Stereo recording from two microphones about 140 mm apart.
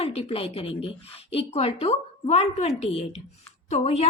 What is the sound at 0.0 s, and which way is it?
A woman's voice, 45° left (ahead or behind).